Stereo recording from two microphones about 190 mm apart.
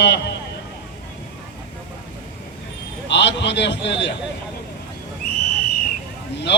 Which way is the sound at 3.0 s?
65° left (ahead or behind).